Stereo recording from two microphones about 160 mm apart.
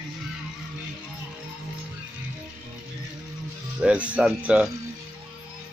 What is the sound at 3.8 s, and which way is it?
Speech, 10° right (ahead or behind).